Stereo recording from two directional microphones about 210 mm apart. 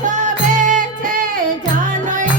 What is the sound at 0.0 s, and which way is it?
Music, 35° right (ahead or behind).